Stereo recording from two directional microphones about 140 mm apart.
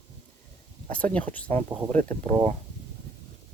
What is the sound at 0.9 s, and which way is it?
Speech, 10° left (ahead or behind).